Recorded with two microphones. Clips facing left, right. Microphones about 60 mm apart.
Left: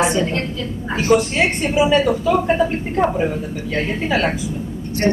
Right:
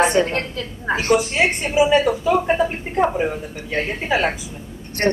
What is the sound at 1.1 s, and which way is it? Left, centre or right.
A woman's voice, centre.